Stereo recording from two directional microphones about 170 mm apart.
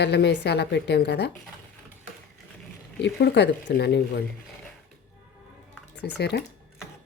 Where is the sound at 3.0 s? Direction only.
85° left.